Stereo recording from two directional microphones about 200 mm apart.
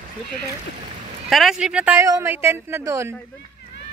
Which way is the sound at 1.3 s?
Centre (ahead or behind).